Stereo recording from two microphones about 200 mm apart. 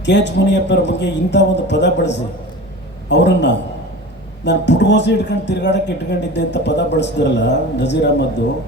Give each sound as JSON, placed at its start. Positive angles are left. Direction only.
{"t": 0.0, "sound": "speech", "side_deg": 60}